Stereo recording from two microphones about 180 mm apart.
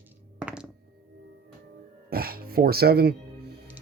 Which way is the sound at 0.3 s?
5° right (ahead or behind).